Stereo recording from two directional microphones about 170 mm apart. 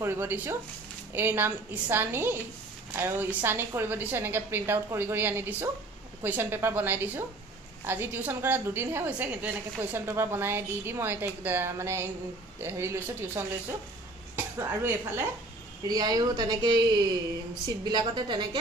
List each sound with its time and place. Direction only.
0.0 s a woman's voice: 15° right (ahead or behind)
17.8 s speech: 25° right (ahead or behind)